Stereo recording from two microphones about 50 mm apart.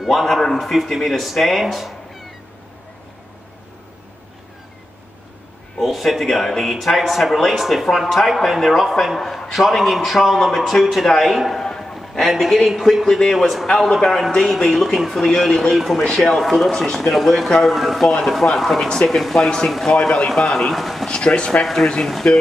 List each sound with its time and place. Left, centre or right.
0.0 s speech: centre
5.8 s a man's voice: centre
21.1 s speech: centre